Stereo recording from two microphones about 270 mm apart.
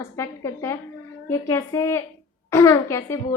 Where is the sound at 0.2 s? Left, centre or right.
Centre.